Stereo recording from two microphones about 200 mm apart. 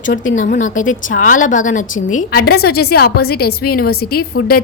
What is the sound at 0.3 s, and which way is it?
A woman's voice, 40° left (ahead or behind).